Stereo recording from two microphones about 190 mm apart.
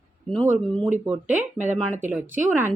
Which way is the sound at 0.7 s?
5° left (ahead or behind).